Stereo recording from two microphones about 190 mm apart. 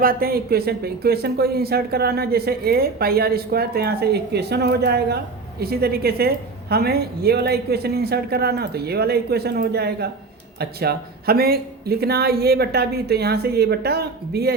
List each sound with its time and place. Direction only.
0.0 s speech: 50° right (ahead or behind)